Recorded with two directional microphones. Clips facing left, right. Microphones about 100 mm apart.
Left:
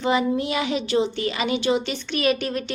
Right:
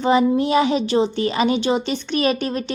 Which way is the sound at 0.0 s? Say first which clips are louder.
Right 5 dB; 35° right (ahead or behind).